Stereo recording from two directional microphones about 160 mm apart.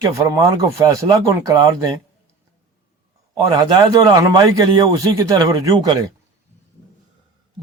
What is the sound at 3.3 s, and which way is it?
A man's voice, 25° right (ahead or behind).